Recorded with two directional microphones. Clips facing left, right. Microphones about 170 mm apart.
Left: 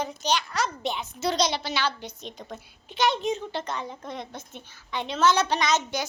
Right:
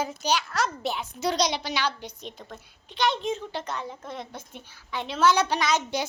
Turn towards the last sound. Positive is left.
turn(degrees=-10)  # may be behind; listen again after turning